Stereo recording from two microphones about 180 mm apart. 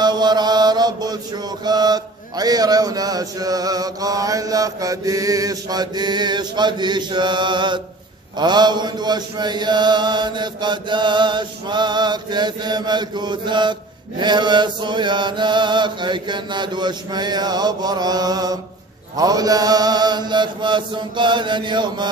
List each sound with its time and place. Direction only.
0.0 s mantra: 25° right (ahead or behind)